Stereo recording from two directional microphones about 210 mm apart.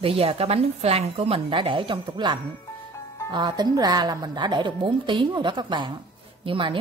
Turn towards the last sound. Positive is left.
turn(degrees=-25)  # may be behind; listen again after turning